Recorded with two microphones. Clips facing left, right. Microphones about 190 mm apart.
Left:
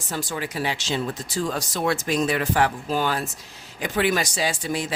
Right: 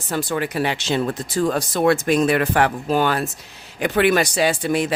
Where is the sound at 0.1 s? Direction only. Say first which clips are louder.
Right 6 dB; 60° right (ahead or behind).